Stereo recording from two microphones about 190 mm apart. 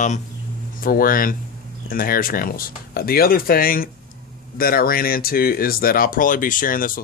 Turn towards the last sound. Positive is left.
turn(degrees=45)  # may be behind; listen again after turning